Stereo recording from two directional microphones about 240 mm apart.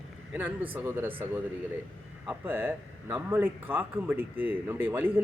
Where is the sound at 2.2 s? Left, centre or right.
Centre.